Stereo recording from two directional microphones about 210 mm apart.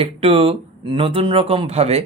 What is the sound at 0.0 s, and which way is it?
Speech, 25° right (ahead or behind).